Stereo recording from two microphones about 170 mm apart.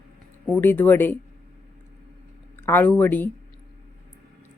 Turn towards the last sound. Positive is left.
turn(degrees=10)  # may be behind; listen again after turning